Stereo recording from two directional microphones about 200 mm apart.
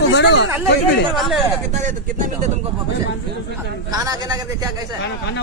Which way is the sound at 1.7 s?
40° right (ahead or behind).